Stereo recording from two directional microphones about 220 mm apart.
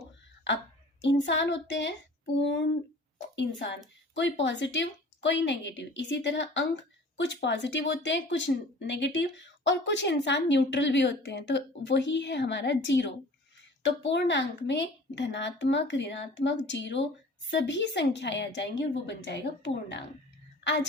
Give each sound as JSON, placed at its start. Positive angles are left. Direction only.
{"t": 1.0, "sound": "speech", "side_deg": 55}
{"t": 3.3, "sound": "speech", "side_deg": 55}